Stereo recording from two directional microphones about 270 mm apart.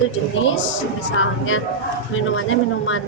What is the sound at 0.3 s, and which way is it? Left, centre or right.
Speech, left.